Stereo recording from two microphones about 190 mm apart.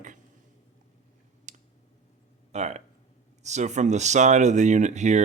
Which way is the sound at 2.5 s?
35° right (ahead or behind).